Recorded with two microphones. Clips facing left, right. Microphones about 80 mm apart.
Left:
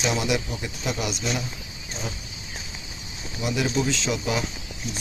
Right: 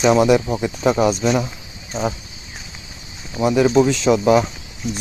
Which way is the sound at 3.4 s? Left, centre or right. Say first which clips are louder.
Right 11 dB; right.